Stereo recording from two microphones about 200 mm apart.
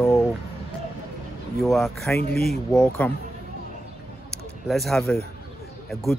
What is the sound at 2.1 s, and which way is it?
Speech, 50° left (ahead or behind).